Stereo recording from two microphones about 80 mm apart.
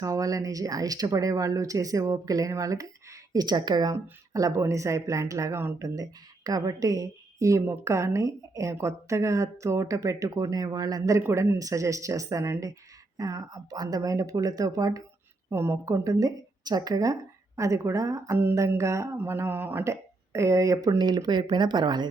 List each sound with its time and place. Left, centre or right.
0.0 s speech: right
4.3 s a woman's voice: right
5.8 s a woman's voice: right
11.2 s speech: right
15.4 s speech: right
15.9 s a woman's voice: right
19.1 s mantra: right
19.8 s speech: right
21.0 s speech: right